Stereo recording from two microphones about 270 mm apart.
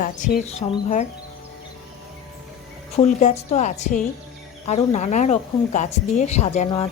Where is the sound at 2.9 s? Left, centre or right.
Left.